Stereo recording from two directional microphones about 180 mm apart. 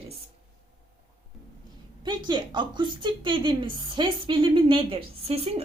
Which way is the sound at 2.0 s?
25° right (ahead or behind).